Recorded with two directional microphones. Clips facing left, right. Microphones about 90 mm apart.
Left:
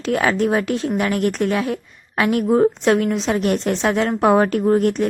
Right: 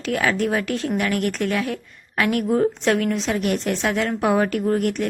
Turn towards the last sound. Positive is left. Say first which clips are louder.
# left 4 dB
turn(degrees=25)  # may be behind; listen again after turning